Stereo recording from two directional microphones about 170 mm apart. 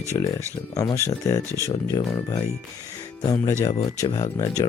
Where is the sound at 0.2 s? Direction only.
20° left (ahead or behind).